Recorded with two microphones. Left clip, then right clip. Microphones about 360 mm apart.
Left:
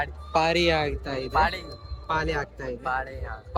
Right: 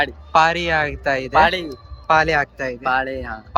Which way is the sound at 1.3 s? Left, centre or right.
Right.